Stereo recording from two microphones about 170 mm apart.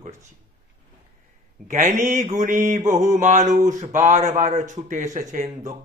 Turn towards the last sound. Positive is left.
turn(degrees=-45)  # may be behind; listen again after turning